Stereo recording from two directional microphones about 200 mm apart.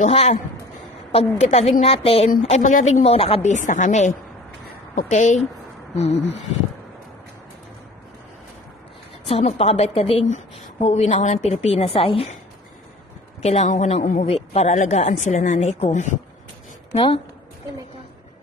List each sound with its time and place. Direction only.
0.0 s speech: 30° left (ahead or behind)
9.3 s speech: 30° left (ahead or behind)
13.4 s speech: 35° left (ahead or behind)